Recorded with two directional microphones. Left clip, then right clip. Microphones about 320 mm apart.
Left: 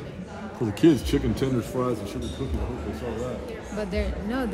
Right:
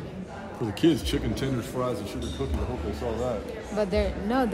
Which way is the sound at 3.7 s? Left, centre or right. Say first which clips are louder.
Right 5 dB; right.